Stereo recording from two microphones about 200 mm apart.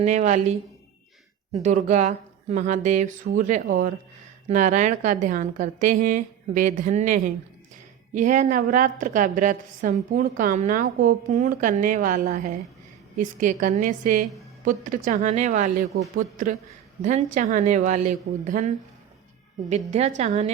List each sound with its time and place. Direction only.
0.0 s a woman's voice: 35° right (ahead or behind)
1.6 s a woman's voice: 35° right (ahead or behind)
19.7 s a woman's voice: 35° right (ahead or behind)